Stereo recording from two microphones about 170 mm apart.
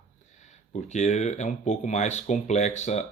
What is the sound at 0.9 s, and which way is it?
Speech, 45° left (ahead or behind).